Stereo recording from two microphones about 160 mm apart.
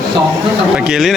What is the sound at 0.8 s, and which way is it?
Speech, 5° right (ahead or behind).